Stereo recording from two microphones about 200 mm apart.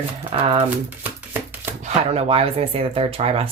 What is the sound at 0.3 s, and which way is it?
Speech, 25° right (ahead or behind).